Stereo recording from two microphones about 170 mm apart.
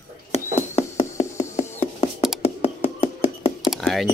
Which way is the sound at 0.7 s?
40° left (ahead or behind).